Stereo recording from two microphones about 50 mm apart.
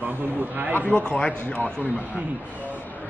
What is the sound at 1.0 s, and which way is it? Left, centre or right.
Speech, left.